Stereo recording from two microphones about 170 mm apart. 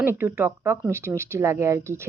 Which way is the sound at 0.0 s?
15° right (ahead or behind).